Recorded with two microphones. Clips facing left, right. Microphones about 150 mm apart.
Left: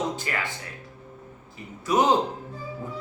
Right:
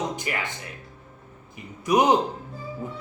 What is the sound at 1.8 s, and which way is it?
Speech, 15° right (ahead or behind).